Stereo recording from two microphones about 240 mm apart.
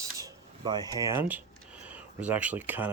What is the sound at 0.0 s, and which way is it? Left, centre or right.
Speech, centre.